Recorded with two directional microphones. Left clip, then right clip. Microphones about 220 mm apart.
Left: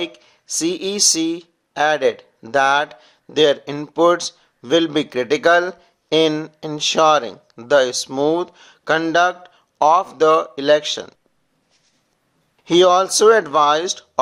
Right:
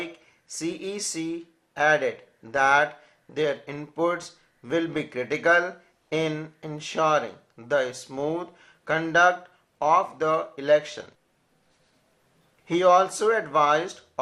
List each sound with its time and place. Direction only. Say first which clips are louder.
0.0 s speech: left 9 dB; 40° left (ahead or behind)
12.6 s speech: left 6 dB; 45° left (ahead or behind)